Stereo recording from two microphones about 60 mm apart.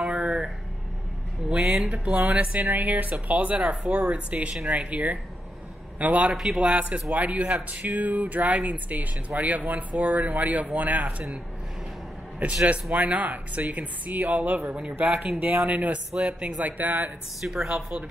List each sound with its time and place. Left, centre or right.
0.0 s music: centre
1.5 s speech: centre
6.3 s a man's voice: centre
6.7 s speech: right
12.9 s speech: right
16.1 s speech: centre
16.3 s speech: right
17.4 s speech: centre